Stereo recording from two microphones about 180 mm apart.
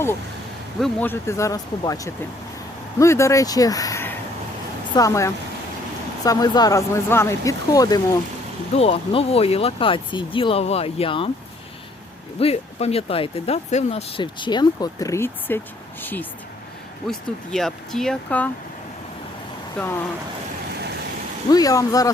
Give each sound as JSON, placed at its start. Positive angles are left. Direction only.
{"t": 0.8, "sound": "speech", "side_deg": 10}
{"t": 8.7, "sound": "speech", "side_deg": 30}
{"t": 12.4, "sound": "speech", "side_deg": 35}
{"t": 19.8, "sound": "speech", "side_deg": 10}
{"t": 21.5, "sound": "speech", "side_deg": 20}